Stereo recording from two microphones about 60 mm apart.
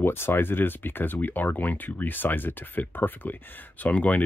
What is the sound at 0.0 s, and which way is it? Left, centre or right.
Speech, left.